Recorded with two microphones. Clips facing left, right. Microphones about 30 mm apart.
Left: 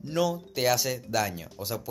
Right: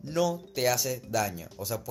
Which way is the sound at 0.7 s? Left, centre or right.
Left.